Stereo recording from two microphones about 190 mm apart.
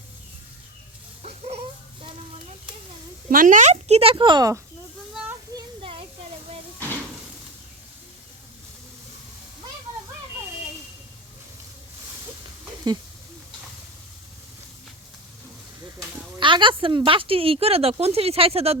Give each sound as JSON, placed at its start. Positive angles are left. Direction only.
{"t": 3.2, "sound": "a woman's voice", "side_deg": -45}
{"t": 5.5, "sound": "a sound", "side_deg": -30}
{"t": 16.4, "sound": "speech", "side_deg": -25}